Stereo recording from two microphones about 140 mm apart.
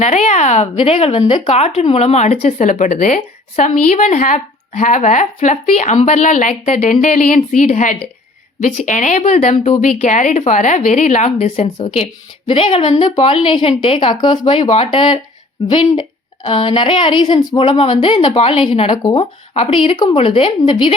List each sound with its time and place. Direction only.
0.0 s speech: 55° left (ahead or behind)
0.8 s a woman's voice: 45° left (ahead or behind)
7.0 s a woman's voice: 65° left (ahead or behind)
11.8 s a woman's voice: 40° left (ahead or behind)